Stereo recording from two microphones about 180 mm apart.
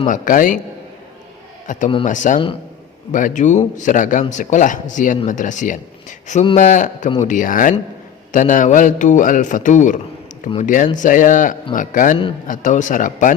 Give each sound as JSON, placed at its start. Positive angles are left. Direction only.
{"t": 0.1, "sound": "speech", "side_deg": 45}
{"t": 1.6, "sound": "a man's voice", "side_deg": 45}